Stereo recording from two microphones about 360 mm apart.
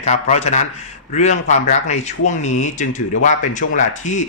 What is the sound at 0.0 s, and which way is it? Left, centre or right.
Speech, centre.